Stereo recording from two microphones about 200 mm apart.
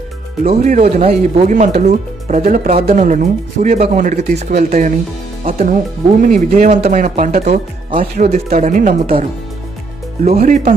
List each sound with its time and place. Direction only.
0.4 s speech: 40° right (ahead or behind)
10.2 s speech: 35° right (ahead or behind)